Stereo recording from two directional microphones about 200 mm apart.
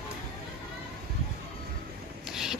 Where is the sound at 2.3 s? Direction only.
Centre (ahead or behind).